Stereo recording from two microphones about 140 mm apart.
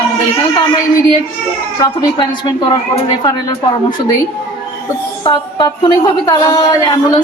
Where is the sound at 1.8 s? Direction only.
30° left (ahead or behind).